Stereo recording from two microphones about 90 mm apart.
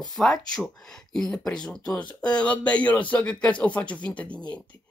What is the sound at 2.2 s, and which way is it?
A woman's voice, 10° left (ahead or behind).